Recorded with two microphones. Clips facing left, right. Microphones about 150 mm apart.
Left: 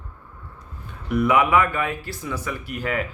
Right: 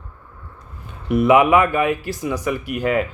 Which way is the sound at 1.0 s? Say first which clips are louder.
Right 5 dB; 25° right (ahead or behind).